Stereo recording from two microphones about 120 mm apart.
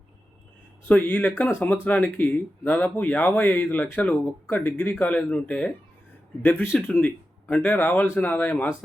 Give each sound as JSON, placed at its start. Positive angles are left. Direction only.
{"t": 0.9, "sound": "speech", "side_deg": 15}
{"t": 6.9, "sound": "a sound", "side_deg": 20}
{"t": 7.5, "sound": "speech", "side_deg": 15}